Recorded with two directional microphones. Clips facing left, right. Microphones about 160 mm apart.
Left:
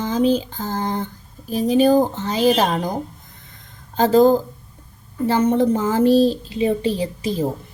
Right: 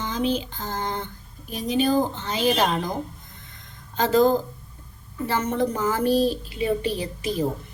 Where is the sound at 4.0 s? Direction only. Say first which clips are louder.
Left 5 dB; 35° left (ahead or behind).